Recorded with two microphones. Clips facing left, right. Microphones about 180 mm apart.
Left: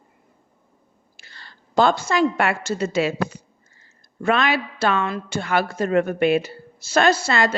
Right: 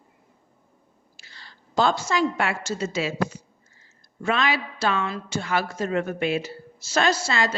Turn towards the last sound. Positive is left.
turn(degrees=60)  # may be behind; listen again after turning